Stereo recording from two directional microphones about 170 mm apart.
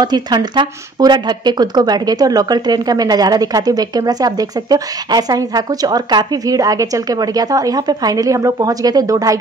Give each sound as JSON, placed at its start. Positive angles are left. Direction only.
{"t": 0.0, "sound": "speech", "side_deg": -25}